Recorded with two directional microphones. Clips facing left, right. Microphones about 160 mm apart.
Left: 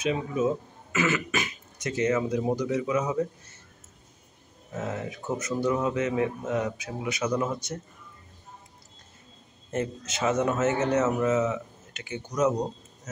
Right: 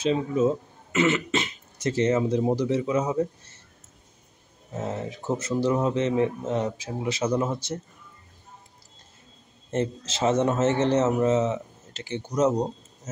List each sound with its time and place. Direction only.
0.0 s a man's voice: 30° right (ahead or behind)
4.7 s a man's voice: 30° right (ahead or behind)
9.7 s a man's voice: 30° right (ahead or behind)